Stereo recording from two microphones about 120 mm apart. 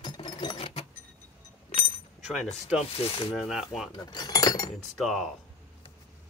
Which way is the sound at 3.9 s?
35° left (ahead or behind).